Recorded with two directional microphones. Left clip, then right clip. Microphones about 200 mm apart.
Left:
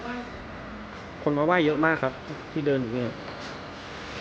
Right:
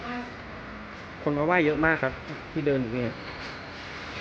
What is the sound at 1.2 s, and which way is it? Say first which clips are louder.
Speech: left 1 dB; centre (ahead or behind).